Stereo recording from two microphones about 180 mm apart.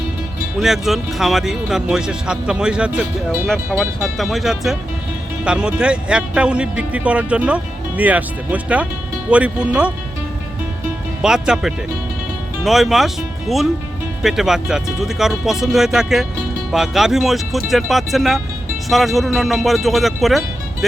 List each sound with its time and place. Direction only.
0.6 s speech: centre (ahead or behind)
11.2 s speech: 5° right (ahead or behind)
14.2 s speech: centre (ahead or behind)